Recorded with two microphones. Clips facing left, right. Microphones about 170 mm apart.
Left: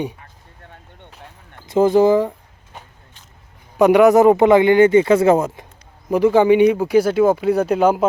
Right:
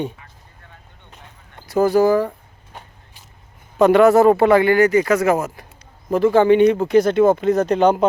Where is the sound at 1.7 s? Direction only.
20° left (ahead or behind).